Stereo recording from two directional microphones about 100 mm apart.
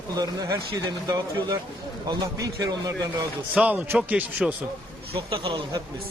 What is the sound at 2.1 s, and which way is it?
Speech, 35° right (ahead or behind).